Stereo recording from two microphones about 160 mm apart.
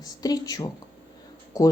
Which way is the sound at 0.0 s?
25° left (ahead or behind).